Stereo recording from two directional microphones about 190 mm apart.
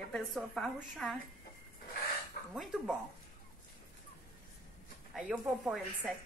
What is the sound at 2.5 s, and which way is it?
Speech, centre (ahead or behind).